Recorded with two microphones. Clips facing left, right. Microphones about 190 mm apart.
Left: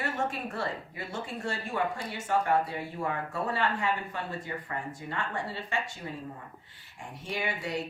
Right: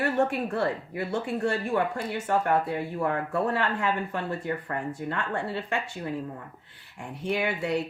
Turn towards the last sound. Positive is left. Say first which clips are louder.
# right 6 dB
turn(degrees=-60)  # may be behind; listen again after turning